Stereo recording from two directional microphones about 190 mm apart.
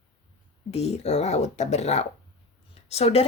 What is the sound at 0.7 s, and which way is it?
Speech, 35° left (ahead or behind).